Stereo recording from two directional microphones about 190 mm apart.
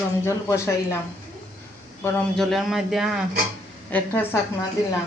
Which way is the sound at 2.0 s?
5° left (ahead or behind).